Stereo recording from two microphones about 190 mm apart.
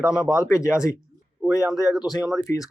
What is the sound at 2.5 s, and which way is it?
Speech, 15° left (ahead or behind).